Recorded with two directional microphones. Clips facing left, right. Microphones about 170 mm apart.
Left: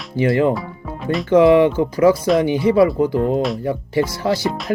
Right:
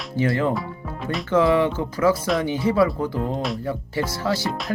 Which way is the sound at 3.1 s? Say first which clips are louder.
Left 8 dB; 70° left (ahead or behind).